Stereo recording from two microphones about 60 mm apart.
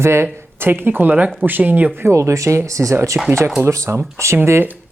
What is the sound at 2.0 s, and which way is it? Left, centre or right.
Speech, right.